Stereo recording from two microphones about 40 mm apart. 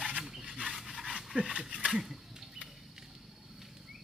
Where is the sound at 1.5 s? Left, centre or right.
Right.